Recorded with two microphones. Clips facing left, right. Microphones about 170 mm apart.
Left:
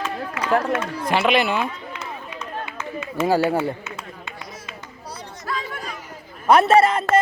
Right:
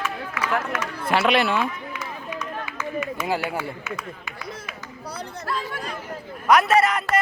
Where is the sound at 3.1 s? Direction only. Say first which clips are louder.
Left 12 dB; 30° left (ahead or behind).